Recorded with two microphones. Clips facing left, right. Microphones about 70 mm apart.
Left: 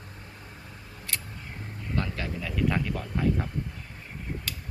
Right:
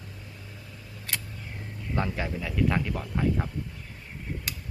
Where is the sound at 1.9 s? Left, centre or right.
Centre.